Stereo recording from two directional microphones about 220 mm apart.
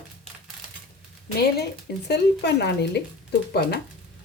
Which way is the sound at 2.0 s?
50° left (ahead or behind).